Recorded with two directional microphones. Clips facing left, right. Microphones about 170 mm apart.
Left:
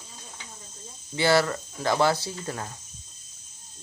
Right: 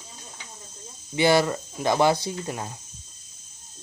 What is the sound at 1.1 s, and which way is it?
Speech, 15° right (ahead or behind).